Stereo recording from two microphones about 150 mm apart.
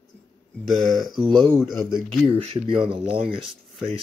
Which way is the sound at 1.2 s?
30° right (ahead or behind).